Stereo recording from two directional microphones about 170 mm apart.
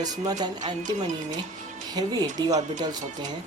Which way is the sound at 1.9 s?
20° right (ahead or behind).